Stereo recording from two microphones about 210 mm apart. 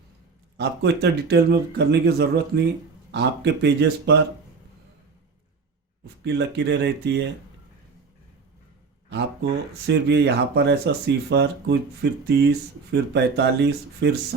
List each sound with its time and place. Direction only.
0.5 s speech: 55° right (ahead or behind)
6.2 s speech: 55° right (ahead or behind)
9.0 s speech: 55° right (ahead or behind)